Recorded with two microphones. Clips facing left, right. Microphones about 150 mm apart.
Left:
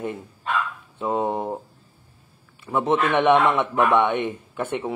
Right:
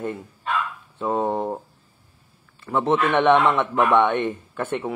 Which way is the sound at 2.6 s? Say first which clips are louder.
Right 1 dB; 15° left (ahead or behind).